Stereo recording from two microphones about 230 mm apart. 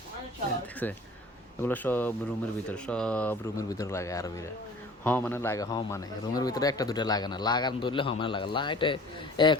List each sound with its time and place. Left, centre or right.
0.8 s a man's voice: centre